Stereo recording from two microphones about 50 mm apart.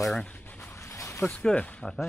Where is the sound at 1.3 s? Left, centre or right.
Left.